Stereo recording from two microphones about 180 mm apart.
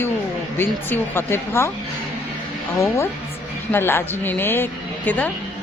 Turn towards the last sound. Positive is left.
turn(degrees=10)  # may be behind; listen again after turning